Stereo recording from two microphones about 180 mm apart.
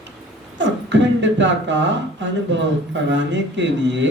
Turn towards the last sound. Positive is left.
turn(degrees=-85)